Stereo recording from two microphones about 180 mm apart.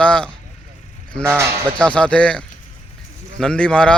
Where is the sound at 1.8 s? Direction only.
5° left (ahead or behind).